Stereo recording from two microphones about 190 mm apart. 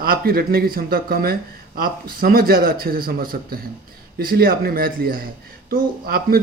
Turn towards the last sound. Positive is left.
turn(degrees=-50)  # may be behind; listen again after turning